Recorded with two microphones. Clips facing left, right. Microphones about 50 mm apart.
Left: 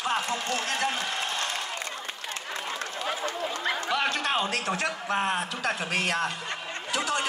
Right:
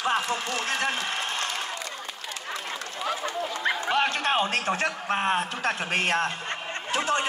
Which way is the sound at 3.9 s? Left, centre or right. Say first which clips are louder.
Right 3 dB; right.